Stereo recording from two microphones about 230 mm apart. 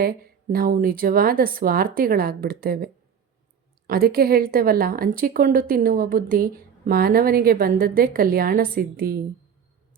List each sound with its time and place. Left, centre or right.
0.0 s a woman's voice: right